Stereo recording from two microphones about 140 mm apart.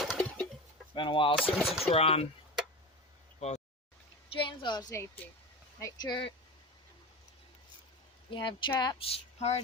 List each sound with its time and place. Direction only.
0.0 s chicken: 5° left (ahead or behind)
0.9 s speech: 35° left (ahead or behind)
1.6 s speech: centre (ahead or behind)
1.9 s speech: 45° left (ahead or behind)
3.4 s speech: 55° left (ahead or behind)
4.3 s speech: 35° left (ahead or behind)
8.3 s speech: 35° left (ahead or behind)